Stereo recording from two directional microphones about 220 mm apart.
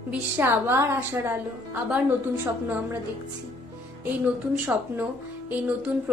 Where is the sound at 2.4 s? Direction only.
10° right (ahead or behind).